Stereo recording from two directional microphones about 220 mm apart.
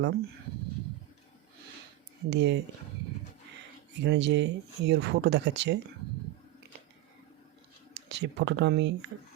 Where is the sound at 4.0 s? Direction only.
50° right (ahead or behind).